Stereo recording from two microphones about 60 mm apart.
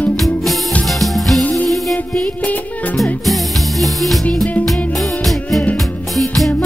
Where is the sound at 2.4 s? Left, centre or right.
Left.